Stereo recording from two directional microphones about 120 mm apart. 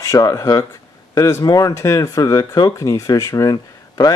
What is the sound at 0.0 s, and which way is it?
Speech, 30° left (ahead or behind).